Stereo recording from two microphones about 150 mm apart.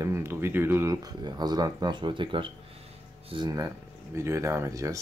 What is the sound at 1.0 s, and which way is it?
Speech, 25° right (ahead or behind).